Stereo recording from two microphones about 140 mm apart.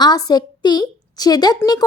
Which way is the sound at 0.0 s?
30° left (ahead or behind).